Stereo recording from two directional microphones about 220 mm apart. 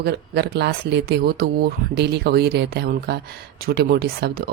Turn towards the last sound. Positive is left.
turn(degrees=-45)  # may be behind; listen again after turning